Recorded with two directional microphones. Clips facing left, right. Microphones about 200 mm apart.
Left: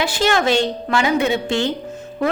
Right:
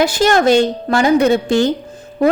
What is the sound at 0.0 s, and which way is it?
Speech, 40° right (ahead or behind).